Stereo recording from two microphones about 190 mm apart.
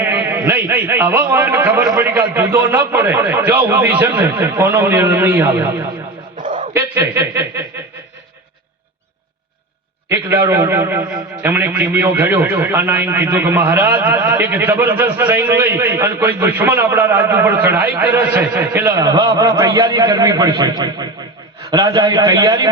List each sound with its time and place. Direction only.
0.0 s a man's voice: 10° right (ahead or behind)
6.3 s a sound: 45° right (ahead or behind)
6.7 s a man's voice: 10° right (ahead or behind)
10.1 s a man's voice: 10° right (ahead or behind)